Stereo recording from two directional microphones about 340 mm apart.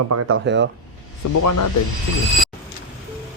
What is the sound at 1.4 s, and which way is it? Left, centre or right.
Speech, left.